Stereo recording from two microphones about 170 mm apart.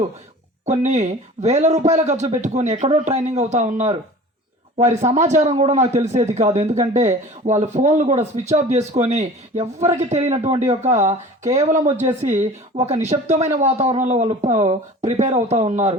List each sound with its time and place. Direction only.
0.6 s a man's voice: 45° right (ahead or behind)